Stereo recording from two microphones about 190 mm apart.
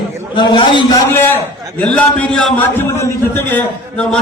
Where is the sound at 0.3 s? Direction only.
25° left (ahead or behind).